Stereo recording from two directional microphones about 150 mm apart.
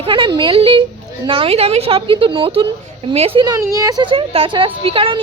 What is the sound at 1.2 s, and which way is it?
A woman's voice, 35° right (ahead or behind).